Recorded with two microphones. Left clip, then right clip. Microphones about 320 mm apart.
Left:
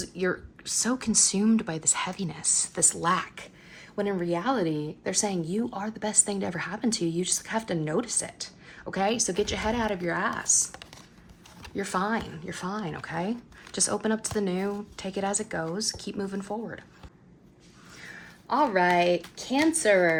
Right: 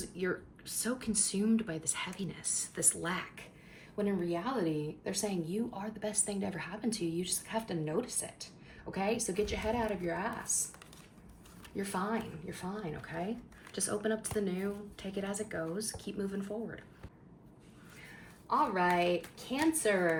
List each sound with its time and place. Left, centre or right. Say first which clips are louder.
0.2 s a woman's voice: left 7 dB; centre
18.4 s a woman's voice: left 7 dB; left